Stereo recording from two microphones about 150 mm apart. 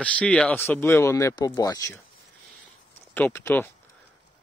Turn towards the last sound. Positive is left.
turn(degrees=15)  # may be behind; listen again after turning